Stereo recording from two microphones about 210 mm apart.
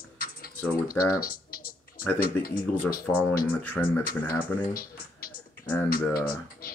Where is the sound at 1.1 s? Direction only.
45° left (ahead or behind).